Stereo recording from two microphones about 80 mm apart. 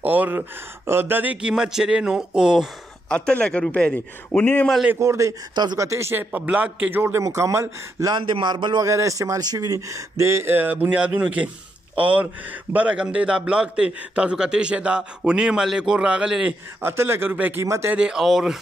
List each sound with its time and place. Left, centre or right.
0.0 s speech: right
1.5 s a man's voice: centre
3.1 s speech: centre
4.9 s speech: right
5.5 s speech: right
5.8 s speech: right
6.3 s speech: centre; by 7.6 s right
8.2 s speech: right
8.8 s speech: right
9.8 s a man's voice: right; by 16.5 s centre
16.8 s speech: right
17.9 s speech: centre